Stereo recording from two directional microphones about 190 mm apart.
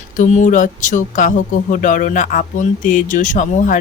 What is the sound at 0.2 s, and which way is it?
Speech, 40° left (ahead or behind).